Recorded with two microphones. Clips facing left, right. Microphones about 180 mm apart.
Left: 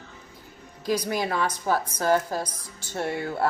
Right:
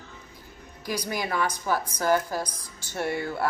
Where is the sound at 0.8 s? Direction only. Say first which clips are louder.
Left 4 dB; 30° left (ahead or behind).